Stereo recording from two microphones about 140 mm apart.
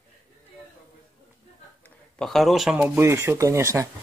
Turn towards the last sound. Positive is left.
turn(degrees=-20)  # may be behind; listen again after turning